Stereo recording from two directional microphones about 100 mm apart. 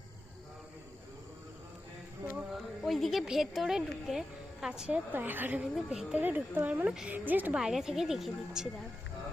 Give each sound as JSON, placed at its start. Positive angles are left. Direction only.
{"t": 2.3, "sound": "speech", "side_deg": 0}
{"t": 5.1, "sound": "speech", "side_deg": -20}
{"t": 5.7, "sound": "speech", "side_deg": -5}
{"t": 6.2, "sound": "speech", "side_deg": -20}
{"t": 7.5, "sound": "speech", "side_deg": -5}